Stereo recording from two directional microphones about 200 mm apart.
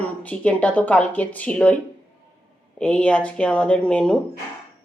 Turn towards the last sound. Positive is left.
turn(degrees=5)  # may be behind; listen again after turning